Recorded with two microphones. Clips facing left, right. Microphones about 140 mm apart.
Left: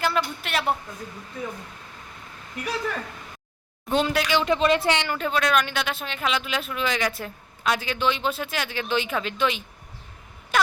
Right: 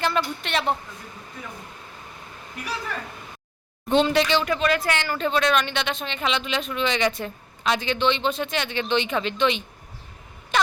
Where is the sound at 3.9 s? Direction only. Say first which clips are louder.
Right 3 dB; 5° left (ahead or behind).